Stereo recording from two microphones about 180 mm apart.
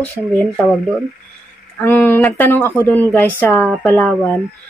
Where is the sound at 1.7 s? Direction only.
10° left (ahead or behind).